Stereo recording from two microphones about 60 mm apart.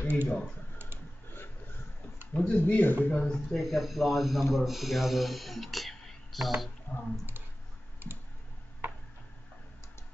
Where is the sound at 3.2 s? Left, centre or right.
Centre.